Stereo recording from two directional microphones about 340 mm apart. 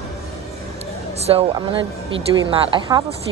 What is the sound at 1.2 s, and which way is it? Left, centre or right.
Speech, centre.